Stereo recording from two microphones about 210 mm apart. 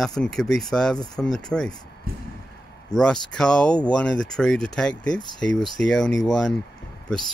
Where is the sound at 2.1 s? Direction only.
45° right (ahead or behind).